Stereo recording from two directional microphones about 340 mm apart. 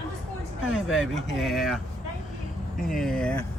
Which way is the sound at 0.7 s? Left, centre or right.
Left.